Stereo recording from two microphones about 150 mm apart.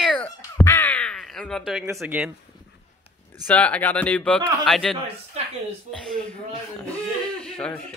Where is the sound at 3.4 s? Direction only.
10° left (ahead or behind).